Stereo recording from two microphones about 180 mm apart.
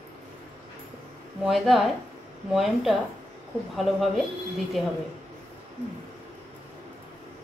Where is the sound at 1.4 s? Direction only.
Centre (ahead or behind).